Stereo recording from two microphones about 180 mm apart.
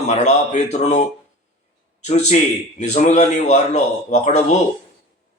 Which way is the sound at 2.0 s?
40° left (ahead or behind).